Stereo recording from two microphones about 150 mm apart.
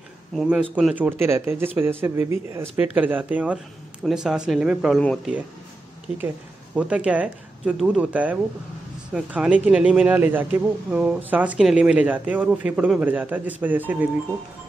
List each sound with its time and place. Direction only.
0.3 s speech: 5° right (ahead or behind)
6.1 s speech: 10° right (ahead or behind)